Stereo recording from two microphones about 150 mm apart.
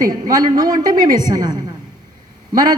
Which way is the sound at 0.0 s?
25° right (ahead or behind).